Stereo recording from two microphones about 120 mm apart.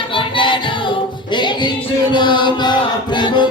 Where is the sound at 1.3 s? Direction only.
40° left (ahead or behind).